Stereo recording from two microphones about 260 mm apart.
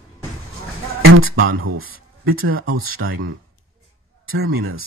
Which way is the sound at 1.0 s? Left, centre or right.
Right.